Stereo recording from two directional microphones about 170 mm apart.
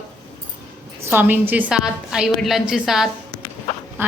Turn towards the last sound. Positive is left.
turn(degrees=-15)  # may be behind; listen again after turning